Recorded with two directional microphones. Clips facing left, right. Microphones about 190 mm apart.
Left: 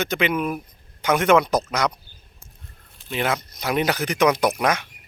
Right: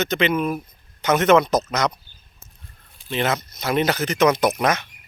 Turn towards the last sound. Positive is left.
turn(degrees=10)  # may be behind; listen again after turning